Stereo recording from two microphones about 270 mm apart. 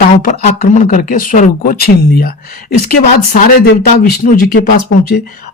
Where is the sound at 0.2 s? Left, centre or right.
Left.